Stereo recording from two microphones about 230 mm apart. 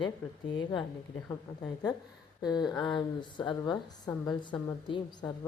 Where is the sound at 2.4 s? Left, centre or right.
Centre.